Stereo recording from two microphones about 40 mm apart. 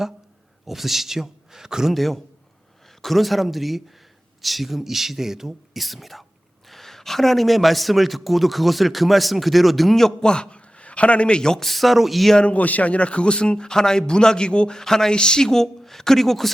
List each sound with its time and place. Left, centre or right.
0.6 s a man's voice: centre
1.9 s a man's voice: centre
10.2 s a man's voice: left
11.6 s a man's voice: centre
12.4 s speech: left
14.8 s speech: centre